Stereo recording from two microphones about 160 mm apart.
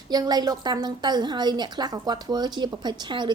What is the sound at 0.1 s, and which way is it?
A woman's voice, 25° right (ahead or behind).